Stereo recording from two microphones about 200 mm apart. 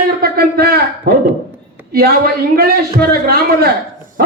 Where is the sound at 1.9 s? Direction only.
50° right (ahead or behind).